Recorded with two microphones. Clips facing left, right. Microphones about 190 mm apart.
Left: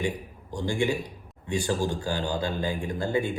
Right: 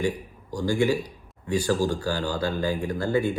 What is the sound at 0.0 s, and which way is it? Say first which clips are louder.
A man's voice: right 3 dB; 20° left (ahead or behind).